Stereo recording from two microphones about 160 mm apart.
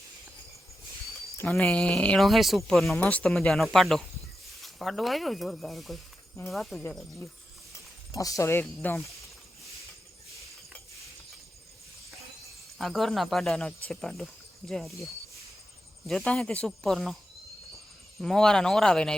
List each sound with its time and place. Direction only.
1.5 s speech: 5° left (ahead or behind)
8.1 s speech: 20° left (ahead or behind)
12.8 s speech: centre (ahead or behind)
16.0 s speech: 5° left (ahead or behind)
18.2 s speech: 5° left (ahead or behind)